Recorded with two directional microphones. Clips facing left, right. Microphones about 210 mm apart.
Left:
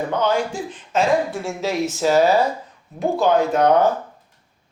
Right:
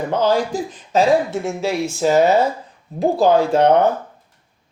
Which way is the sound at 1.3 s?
15° right (ahead or behind).